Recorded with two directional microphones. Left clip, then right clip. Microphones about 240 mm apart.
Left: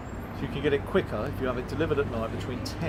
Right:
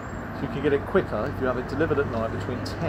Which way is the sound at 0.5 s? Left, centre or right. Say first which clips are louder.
Right 3 dB; centre.